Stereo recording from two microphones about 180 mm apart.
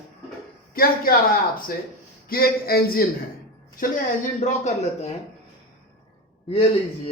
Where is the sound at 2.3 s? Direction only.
55° left (ahead or behind).